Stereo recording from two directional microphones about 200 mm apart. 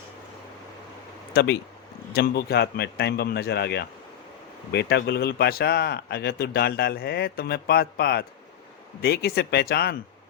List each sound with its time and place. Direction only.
1.3 s a man's voice: 55° left (ahead or behind)